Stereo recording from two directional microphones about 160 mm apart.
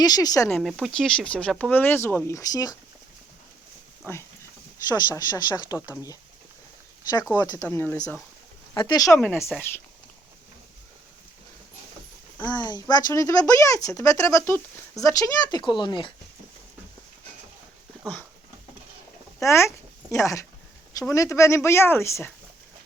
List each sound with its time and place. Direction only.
0.0 s speech: 25° left (ahead or behind)
0.5 s speech: centre (ahead or behind); by 2.7 s 25° left (ahead or behind)
4.1 s speech: 15° left (ahead or behind)
4.9 s speech: 25° left (ahead or behind)
7.3 s speech: 25° left (ahead or behind)
8.7 s speech: 25° left (ahead or behind)
9.1 s speech: 5° left (ahead or behind)
12.5 s speech: 25° left (ahead or behind)
19.4 s speech: 15° left (ahead or behind)